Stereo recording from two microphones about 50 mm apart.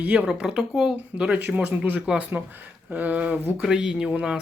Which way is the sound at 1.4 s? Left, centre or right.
Right.